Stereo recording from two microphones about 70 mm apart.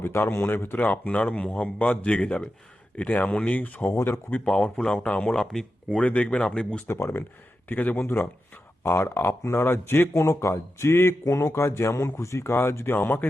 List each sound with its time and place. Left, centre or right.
0.0 s a man's voice: left
4.4 s speech: centre
6.0 s speech: centre
6.8 s speech: left